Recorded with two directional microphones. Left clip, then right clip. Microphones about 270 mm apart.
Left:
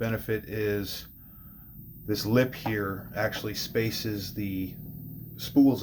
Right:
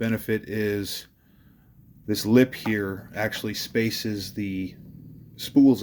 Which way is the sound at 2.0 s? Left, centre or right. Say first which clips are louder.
Right 5 dB; right.